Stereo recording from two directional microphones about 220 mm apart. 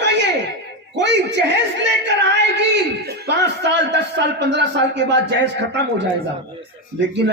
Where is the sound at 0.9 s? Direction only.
55° right (ahead or behind).